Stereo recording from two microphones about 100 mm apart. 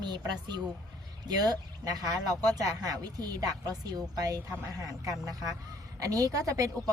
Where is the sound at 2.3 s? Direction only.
35° right (ahead or behind).